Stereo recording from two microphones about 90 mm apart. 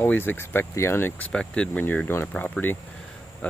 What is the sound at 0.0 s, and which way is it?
Speech, 25° left (ahead or behind).